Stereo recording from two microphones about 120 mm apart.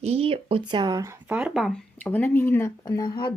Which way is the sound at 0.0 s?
55° right (ahead or behind).